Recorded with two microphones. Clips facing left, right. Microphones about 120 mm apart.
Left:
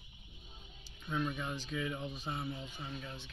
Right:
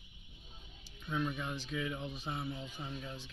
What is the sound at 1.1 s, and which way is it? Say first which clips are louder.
Speech: even; 5° left (ahead or behind).